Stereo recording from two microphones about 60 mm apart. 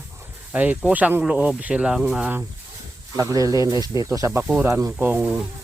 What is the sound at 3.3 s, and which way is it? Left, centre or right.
Speech, right.